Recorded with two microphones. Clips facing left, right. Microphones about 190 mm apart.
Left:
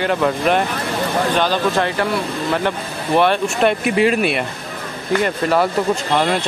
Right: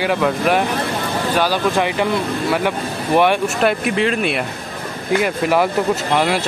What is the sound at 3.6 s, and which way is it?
Speech, centre (ahead or behind).